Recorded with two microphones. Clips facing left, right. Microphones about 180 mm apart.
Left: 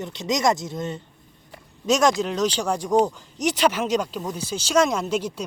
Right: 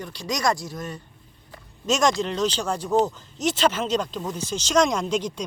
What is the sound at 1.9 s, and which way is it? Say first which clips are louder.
Speech: left 2 dB; 5° left (ahead or behind).